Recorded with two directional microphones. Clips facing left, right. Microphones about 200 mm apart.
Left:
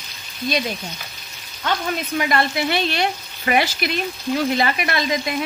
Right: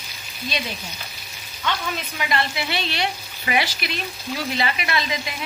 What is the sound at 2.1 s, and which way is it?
Frying, 50° left (ahead or behind).